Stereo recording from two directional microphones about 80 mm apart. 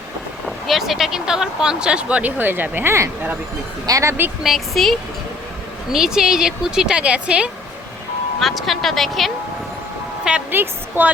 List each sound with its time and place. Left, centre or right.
0.4 s speech: centre; by 3.3 s right
3.8 s speech: right
4.4 s speech: centre
8.4 s speech: centre
10.5 s a woman's voice: right